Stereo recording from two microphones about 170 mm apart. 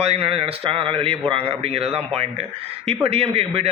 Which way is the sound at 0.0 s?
35° right (ahead or behind).